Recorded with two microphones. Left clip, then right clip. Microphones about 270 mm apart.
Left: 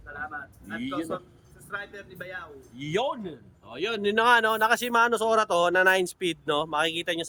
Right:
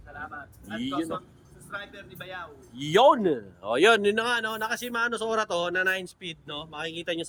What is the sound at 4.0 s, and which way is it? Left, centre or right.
Speech, centre.